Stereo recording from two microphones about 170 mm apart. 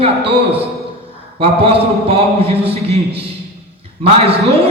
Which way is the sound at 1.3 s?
35° right (ahead or behind).